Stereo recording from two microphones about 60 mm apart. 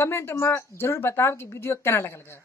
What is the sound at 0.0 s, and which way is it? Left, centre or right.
A woman's voice, left.